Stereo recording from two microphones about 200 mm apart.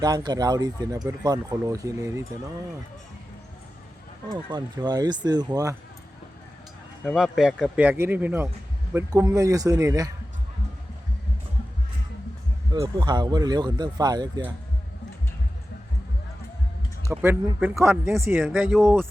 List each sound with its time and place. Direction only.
0.0 s speech: 20° right (ahead or behind)
4.4 s speech: 20° right (ahead or behind)
7.0 s speech: centre (ahead or behind); by 10.1 s 15° right (ahead or behind)
12.7 s speech: 20° right (ahead or behind)
17.1 s speech: 10° right (ahead or behind)